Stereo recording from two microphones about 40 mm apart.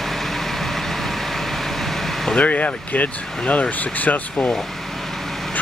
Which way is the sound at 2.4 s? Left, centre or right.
Left.